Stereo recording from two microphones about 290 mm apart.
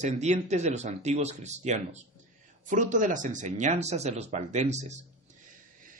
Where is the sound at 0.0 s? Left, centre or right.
Right.